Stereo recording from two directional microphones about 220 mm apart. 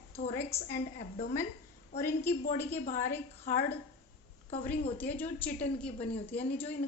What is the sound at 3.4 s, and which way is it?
Speech, 30° left (ahead or behind).